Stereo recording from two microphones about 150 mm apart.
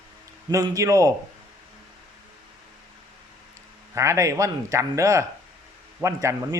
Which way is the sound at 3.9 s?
20° right (ahead or behind).